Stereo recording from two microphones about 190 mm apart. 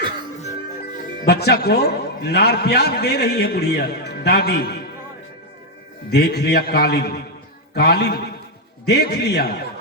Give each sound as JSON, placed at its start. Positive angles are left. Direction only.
{"t": 1.2, "sound": "a man's voice", "side_deg": 60}
{"t": 6.1, "sound": "a man's voice", "side_deg": 60}